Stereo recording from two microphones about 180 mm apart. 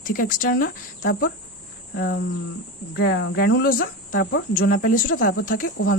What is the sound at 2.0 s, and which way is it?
Speech, 60° left (ahead or behind).